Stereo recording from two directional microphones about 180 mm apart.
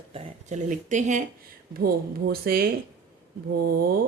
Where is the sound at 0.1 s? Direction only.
40° right (ahead or behind).